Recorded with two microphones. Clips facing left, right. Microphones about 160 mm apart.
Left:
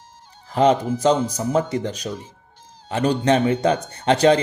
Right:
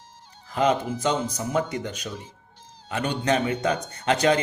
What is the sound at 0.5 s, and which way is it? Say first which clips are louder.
Speech: left 5 dB; 30° left (ahead or behind).